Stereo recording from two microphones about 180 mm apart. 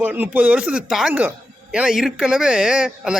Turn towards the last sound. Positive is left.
turn(degrees=-5)  # may be behind; listen again after turning